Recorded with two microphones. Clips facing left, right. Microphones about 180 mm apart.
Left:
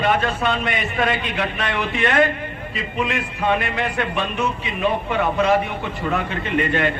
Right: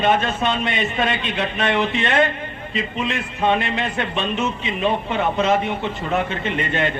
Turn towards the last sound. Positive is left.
turn(degrees=-25)  # may be behind; listen again after turning